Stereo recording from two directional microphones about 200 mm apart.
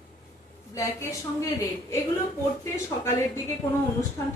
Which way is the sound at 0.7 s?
15° left (ahead or behind).